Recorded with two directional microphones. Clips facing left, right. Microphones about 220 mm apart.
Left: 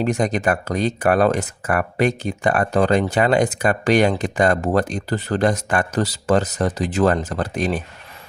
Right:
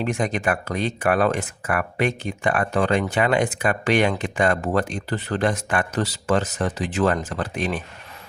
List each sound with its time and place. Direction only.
0.0 s speech: 40° left (ahead or behind)